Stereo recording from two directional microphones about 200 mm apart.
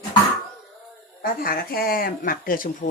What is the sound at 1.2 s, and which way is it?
Speech, 45° left (ahead or behind).